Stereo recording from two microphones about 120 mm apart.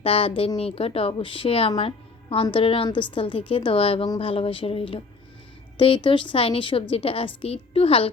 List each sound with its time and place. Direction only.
0.0 s speech: 50° left (ahead or behind)